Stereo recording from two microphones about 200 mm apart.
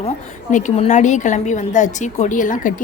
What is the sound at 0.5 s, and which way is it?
A woman's voice, 35° left (ahead or behind).